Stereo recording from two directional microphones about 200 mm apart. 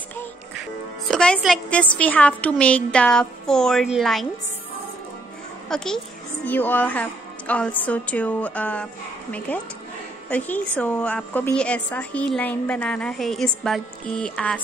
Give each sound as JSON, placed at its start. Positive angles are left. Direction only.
{"t": 0.6, "sound": "speech", "side_deg": 0}
{"t": 5.7, "sound": "a woman's voice", "side_deg": 5}